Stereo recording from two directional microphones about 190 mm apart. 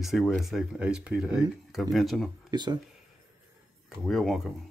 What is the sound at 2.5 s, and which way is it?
Speech, 20° right (ahead or behind).